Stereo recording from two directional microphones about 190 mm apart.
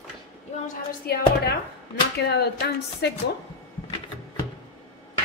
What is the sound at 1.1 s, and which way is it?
A woman's voice, 55° left (ahead or behind).